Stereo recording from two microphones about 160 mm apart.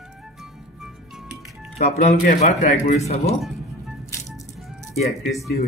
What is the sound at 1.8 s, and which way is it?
Speech, 45° left (ahead or behind).